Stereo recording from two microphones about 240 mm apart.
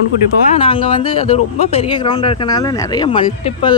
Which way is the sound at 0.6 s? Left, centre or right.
Left.